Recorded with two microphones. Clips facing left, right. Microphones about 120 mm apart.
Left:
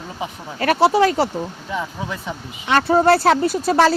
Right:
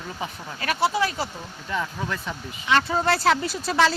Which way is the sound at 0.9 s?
70° left (ahead or behind).